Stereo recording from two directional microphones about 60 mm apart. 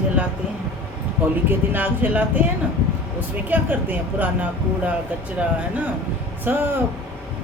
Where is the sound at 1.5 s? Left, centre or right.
Right.